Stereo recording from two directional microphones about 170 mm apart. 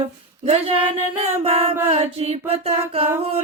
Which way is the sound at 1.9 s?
35° right (ahead or behind).